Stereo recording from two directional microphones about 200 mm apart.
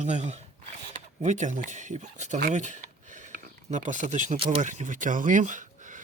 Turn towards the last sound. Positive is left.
turn(degrees=-40)  # may be behind; listen again after turning